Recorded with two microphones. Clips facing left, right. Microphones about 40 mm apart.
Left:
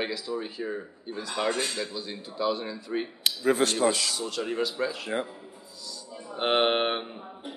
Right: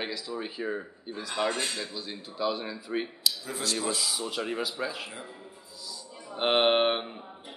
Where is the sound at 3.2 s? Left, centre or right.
Left.